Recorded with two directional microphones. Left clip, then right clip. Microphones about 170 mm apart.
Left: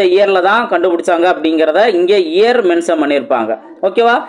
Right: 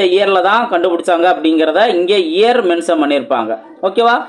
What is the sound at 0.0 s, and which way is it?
Speech, 15° left (ahead or behind).